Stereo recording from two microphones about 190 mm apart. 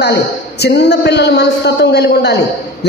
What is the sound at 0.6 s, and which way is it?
Speech, 60° left (ahead or behind).